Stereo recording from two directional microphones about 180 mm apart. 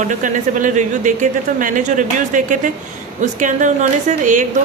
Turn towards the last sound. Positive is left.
turn(degrees=-45)  # may be behind; listen again after turning